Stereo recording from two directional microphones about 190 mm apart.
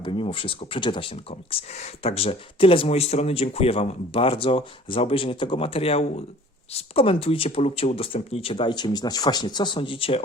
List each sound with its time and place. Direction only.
0.0 s speech: 25° left (ahead or behind)